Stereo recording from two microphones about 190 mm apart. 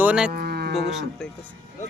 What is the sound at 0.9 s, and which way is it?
Speech, centre (ahead or behind).